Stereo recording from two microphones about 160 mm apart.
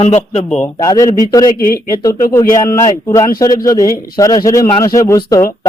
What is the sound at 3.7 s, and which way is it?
A man's voice, 20° left (ahead or behind).